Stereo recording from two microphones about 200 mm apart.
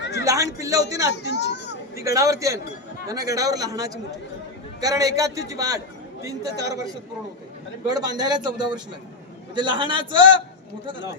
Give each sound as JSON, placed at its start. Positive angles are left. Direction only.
{"t": 0.0, "sound": "a sound", "side_deg": 60}
{"t": 0.3, "sound": "a man's voice", "side_deg": -15}
{"t": 1.1, "sound": "speech", "side_deg": 60}
{"t": 2.0, "sound": "a man's voice", "side_deg": -15}
{"t": 7.9, "sound": "a man's voice", "side_deg": -20}